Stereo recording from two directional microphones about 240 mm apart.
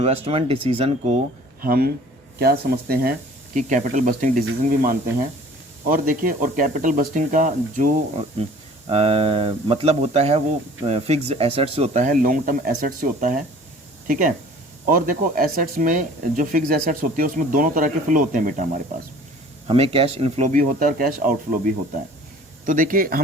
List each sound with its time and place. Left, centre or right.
0.0 s speech: right
1.6 s speech: right
19.6 s speech: right
22.6 s speech: right